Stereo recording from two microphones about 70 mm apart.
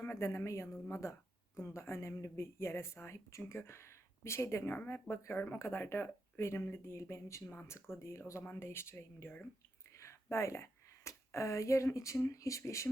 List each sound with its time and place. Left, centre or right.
0.0 s a woman's voice: left